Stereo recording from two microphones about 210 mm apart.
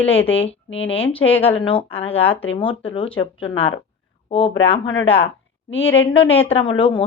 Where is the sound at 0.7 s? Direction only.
65° left (ahead or behind).